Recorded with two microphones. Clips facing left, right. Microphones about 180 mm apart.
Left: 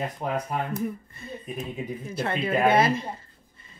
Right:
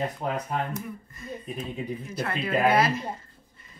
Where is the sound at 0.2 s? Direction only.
5° left (ahead or behind).